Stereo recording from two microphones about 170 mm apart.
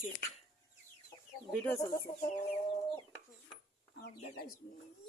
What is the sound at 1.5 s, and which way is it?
Speech, 10° left (ahead or behind).